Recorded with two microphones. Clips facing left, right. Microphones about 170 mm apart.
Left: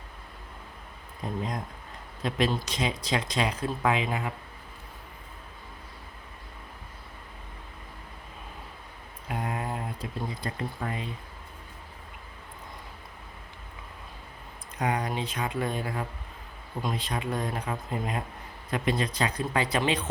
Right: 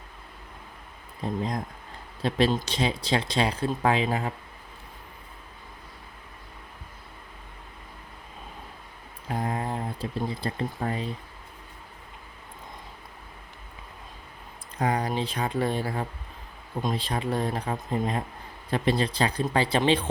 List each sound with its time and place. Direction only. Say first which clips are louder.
1.2 s speech: right 3 dB; 35° right (ahead or behind)
9.3 s speech: right 3 dB; 35° right (ahead or behind)
14.8 s speech: right 3 dB; 30° right (ahead or behind)